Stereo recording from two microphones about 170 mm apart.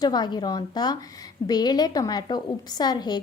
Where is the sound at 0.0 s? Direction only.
25° left (ahead or behind).